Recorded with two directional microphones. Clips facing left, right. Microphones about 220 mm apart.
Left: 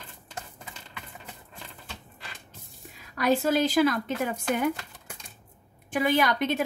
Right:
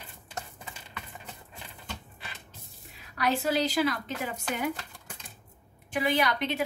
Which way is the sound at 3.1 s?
50° left (ahead or behind).